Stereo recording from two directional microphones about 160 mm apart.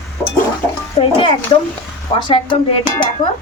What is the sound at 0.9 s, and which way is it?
Speech, 30° left (ahead or behind).